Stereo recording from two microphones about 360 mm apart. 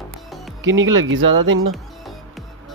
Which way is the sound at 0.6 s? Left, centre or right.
Right.